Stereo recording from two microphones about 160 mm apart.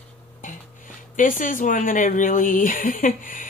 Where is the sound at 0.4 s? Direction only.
55° left (ahead or behind).